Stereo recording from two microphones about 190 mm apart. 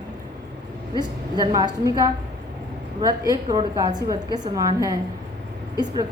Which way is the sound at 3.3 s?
20° right (ahead or behind).